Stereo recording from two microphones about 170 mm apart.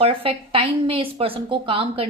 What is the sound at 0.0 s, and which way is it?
A woman's voice, 30° right (ahead or behind).